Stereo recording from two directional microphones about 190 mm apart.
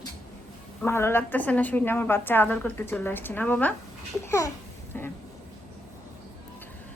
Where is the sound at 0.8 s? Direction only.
15° left (ahead or behind).